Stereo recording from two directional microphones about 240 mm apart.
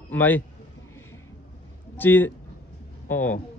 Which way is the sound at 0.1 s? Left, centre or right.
Centre.